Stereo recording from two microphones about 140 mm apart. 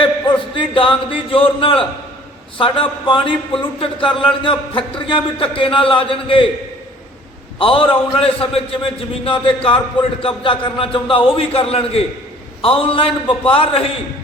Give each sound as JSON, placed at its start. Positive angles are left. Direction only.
{"t": 0.0, "sound": "a sound", "side_deg": 35}
{"t": 2.6, "sound": "a man's voice", "side_deg": 40}
{"t": 7.6, "sound": "a man's voice", "side_deg": 40}